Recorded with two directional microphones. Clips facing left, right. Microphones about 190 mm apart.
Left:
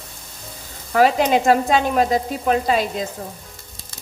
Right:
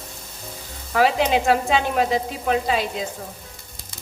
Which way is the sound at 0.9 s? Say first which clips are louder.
Left 3 dB; 45° left (ahead or behind).